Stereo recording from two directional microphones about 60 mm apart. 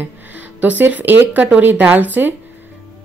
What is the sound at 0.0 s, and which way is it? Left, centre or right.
A woman's voice, right.